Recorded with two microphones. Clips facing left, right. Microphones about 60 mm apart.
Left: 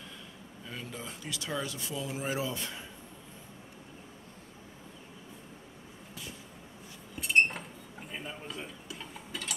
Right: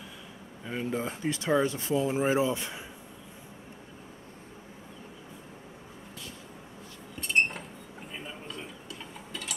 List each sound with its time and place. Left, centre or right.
0.7 s speech: right
7.2 s a sound: centre
8.1 s dishes: centre